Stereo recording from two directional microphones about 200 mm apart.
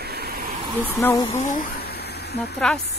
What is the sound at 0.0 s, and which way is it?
Vehicle, 55° right (ahead or behind).